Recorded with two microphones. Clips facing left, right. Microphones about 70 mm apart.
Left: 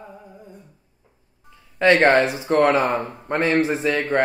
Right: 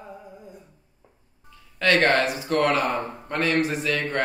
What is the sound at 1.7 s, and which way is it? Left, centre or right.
Speech, left.